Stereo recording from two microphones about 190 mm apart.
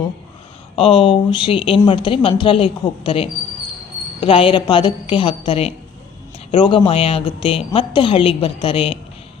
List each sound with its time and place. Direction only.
0.8 s a woman's voice: 25° left (ahead or behind)